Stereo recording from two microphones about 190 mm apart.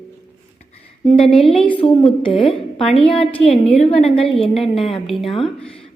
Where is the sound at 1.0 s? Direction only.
30° left (ahead or behind).